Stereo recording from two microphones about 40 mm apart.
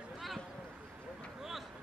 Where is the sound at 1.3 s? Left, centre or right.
Centre.